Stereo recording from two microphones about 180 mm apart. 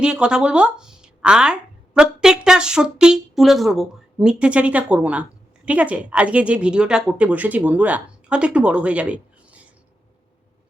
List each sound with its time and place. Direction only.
0.0 s a woman's voice: 5° right (ahead or behind)